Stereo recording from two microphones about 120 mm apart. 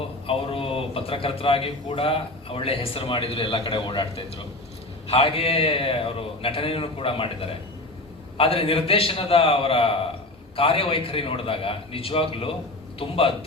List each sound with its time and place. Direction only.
0.3 s a man's voice: 50° left (ahead or behind)